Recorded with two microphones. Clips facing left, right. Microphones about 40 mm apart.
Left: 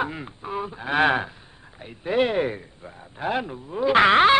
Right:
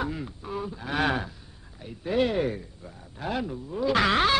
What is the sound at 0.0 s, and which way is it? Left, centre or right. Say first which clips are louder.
A man's voice: left 3 dB; left.